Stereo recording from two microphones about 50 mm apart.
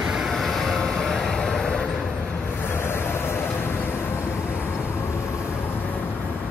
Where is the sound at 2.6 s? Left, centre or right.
Left.